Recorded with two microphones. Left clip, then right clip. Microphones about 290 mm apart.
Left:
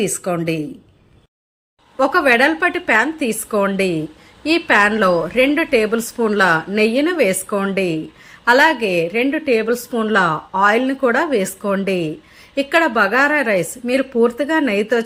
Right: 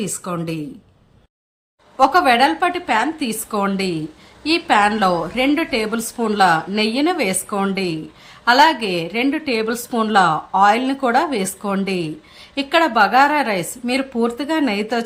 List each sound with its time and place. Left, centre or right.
0.0 s a woman's voice: centre
2.0 s a woman's voice: centre
8.8 s a woman's voice: right
9.1 s a woman's voice: centre